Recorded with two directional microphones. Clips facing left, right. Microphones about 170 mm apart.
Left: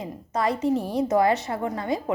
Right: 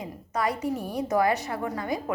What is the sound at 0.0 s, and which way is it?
A woman's voice, 25° left (ahead or behind).